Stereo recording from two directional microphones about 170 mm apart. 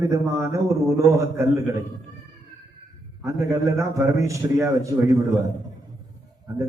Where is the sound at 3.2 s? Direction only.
20° right (ahead or behind).